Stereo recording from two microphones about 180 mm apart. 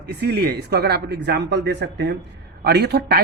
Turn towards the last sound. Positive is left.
turn(degrees=-60)  # may be behind; listen again after turning